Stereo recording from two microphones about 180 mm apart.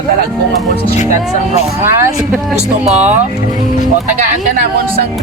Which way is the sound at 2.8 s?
5° right (ahead or behind).